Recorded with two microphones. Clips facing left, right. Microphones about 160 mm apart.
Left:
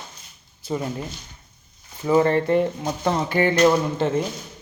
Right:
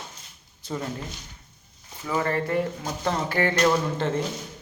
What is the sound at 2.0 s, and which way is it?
Speech, 25° left (ahead or behind).